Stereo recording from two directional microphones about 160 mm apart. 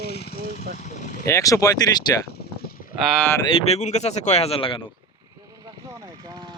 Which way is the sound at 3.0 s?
Centre (ahead or behind).